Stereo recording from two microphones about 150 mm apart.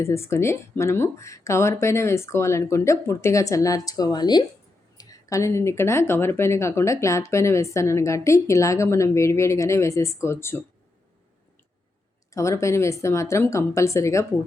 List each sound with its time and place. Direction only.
0.0 s speech: 20° left (ahead or behind)
12.3 s speech: 20° left (ahead or behind)